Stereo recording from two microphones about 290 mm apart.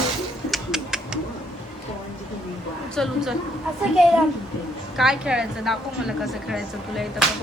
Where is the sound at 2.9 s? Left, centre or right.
Centre.